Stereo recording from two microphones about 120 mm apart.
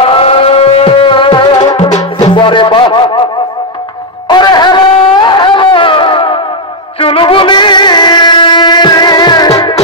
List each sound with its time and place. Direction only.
0.0 s music: 50° left (ahead or behind); by 1.9 s 35° left (ahead or behind)
1.9 s music: 70° left (ahead or behind)
2.3 s music: 45° left (ahead or behind)
4.3 s a sound: 35° left (ahead or behind)
7.0 s music: 50° left (ahead or behind)